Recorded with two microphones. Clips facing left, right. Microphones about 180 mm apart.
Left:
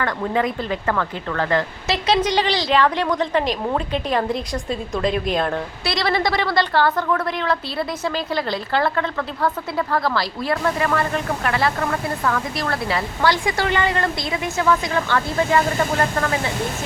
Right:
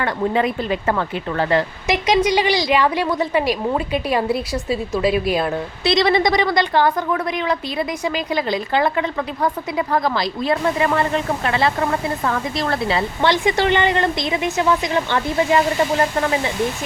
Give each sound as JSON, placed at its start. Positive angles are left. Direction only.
{"t": 0.0, "sound": "speech", "side_deg": -20}
{"t": 5.8, "sound": "a woman's voice", "side_deg": -20}